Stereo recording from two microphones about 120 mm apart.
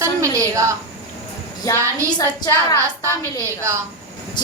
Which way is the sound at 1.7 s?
30° left (ahead or behind).